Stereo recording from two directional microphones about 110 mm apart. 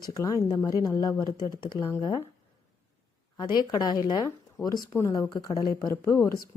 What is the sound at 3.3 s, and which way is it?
A woman's voice, 40° left (ahead or behind).